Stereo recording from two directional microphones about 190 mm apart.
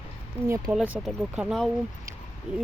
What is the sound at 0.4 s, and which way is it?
Speech, 15° right (ahead or behind).